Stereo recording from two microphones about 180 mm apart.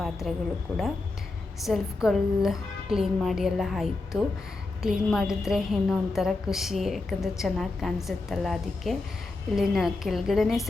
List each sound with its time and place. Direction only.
0.0 s a woman's voice: centre (ahead or behind)
1.6 s a woman's voice: centre (ahead or behind)